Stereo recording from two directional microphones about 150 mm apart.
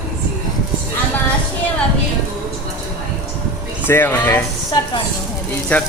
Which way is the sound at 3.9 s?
15° left (ahead or behind).